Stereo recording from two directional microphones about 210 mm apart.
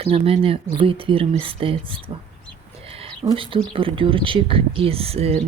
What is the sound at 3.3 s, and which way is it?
Speech, 25° right (ahead or behind).